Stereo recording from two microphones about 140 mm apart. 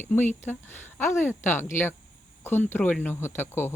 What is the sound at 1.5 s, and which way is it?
Speech, 15° left (ahead or behind).